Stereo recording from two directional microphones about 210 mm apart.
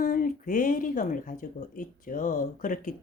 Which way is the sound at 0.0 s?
40° left (ahead or behind).